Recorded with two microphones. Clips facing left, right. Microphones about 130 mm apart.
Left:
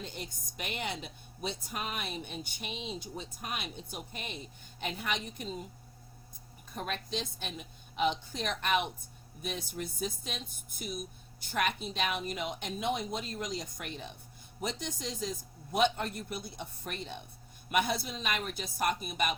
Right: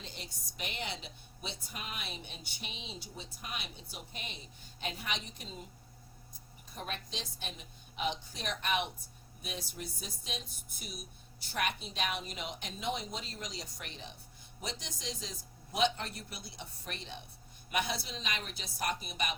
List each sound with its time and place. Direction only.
0.0 s speech: 50° left (ahead or behind)
6.7 s speech: 55° left (ahead or behind)